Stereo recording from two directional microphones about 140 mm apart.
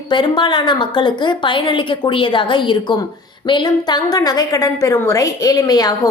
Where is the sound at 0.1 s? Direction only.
35° left (ahead or behind).